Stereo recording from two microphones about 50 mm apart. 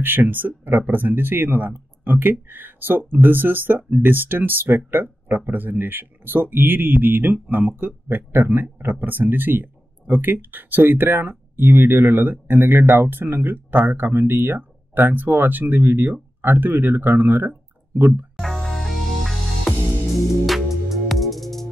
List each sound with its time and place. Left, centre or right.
0.0 s speech: right
18.3 s music: centre
20.9 s music: centre